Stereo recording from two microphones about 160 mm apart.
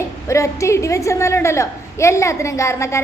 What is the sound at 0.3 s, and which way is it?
A woman's voice, 20° left (ahead or behind).